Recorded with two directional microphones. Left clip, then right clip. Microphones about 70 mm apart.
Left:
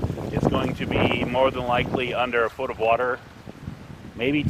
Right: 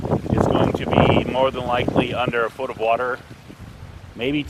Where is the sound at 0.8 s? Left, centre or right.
Right.